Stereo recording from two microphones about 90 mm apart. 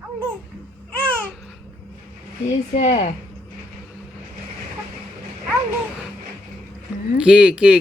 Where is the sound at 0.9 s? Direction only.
15° left (ahead or behind).